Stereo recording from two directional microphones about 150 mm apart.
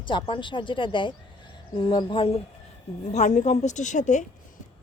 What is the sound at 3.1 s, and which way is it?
A woman's voice, 55° left (ahead or behind).